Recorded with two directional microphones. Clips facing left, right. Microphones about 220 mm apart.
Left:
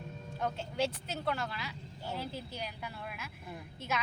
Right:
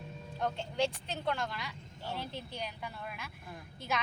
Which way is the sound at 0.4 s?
5° left (ahead or behind).